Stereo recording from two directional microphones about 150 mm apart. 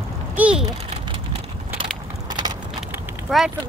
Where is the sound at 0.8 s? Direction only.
40° right (ahead or behind).